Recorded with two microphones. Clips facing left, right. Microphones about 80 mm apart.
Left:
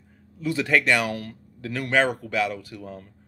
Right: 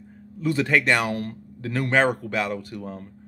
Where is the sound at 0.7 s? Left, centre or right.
Right.